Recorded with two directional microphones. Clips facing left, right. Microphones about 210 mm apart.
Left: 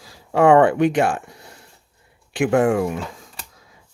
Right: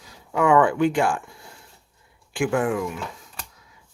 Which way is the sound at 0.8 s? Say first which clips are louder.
Left 3 dB; 65° left (ahead or behind).